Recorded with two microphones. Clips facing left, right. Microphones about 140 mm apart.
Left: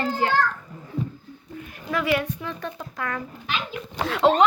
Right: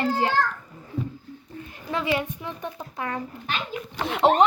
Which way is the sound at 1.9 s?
25° right (ahead or behind).